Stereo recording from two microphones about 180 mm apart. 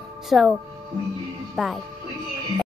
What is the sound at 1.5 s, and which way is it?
Speech, centre (ahead or behind).